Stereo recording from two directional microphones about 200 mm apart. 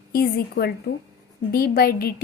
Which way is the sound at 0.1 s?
50° left (ahead or behind).